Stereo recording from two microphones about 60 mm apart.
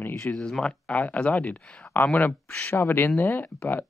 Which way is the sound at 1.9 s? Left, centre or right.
Left.